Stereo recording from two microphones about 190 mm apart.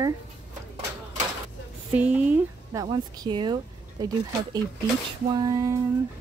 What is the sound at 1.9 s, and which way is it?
Speech, 10° right (ahead or behind).